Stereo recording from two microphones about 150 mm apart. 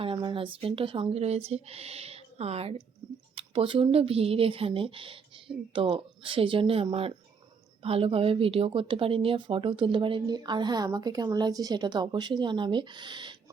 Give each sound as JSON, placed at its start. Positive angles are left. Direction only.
{"t": 0.0, "sound": "a woman's voice", "side_deg": -35}